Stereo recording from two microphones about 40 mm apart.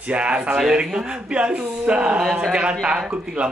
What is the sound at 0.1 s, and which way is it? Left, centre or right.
Speech, right.